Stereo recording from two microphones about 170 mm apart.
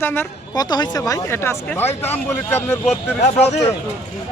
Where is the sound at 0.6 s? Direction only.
25° left (ahead or behind).